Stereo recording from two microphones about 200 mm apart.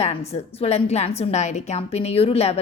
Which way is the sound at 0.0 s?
30° left (ahead or behind).